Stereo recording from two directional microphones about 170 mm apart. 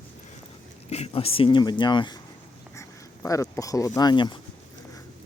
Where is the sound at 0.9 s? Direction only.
35° left (ahead or behind).